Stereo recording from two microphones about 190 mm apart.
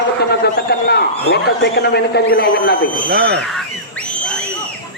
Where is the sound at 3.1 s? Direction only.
60° right (ahead or behind).